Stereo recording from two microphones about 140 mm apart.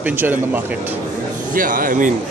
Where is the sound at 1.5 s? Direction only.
80° right.